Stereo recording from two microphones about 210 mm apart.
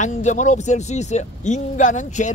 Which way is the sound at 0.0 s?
35° left (ahead or behind).